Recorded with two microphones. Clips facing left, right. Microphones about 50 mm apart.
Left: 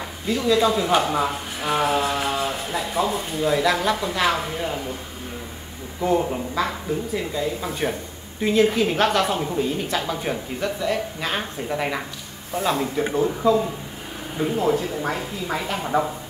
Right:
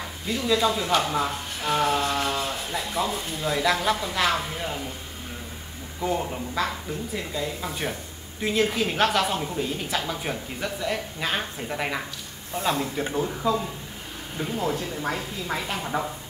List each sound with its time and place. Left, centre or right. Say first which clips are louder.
0.3 s speech: left 4 dB; centre
5.9 s speech: left 6 dB; centre